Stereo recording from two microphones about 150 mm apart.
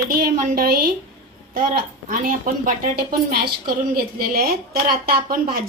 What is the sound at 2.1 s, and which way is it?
A woman's voice, 60° right (ahead or behind).